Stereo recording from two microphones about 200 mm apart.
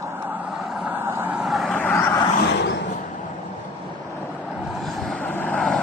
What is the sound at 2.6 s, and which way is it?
Vehicle, 60° left (ahead or behind).